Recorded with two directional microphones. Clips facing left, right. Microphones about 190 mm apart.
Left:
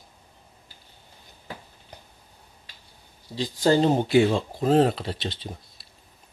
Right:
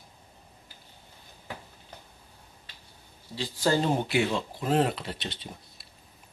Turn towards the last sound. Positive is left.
turn(degrees=30)  # may be behind; listen again after turning